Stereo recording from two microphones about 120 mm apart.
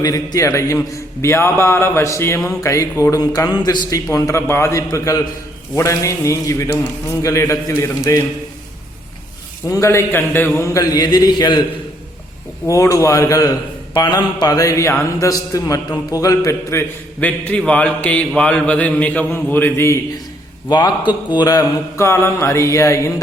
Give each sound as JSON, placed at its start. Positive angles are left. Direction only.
{"t": 0.0, "sound": "a man's voice", "side_deg": 30}
{"t": 9.6, "sound": "a man's voice", "side_deg": 25}
{"t": 12.6, "sound": "a man's voice", "side_deg": 25}
{"t": 17.2, "sound": "a man's voice", "side_deg": 15}
{"t": 20.7, "sound": "a man's voice", "side_deg": 35}